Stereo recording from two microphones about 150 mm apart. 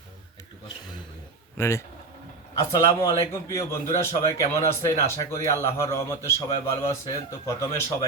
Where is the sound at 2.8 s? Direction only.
20° left (ahead or behind).